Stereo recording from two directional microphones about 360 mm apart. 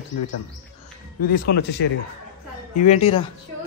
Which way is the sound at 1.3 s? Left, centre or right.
Left.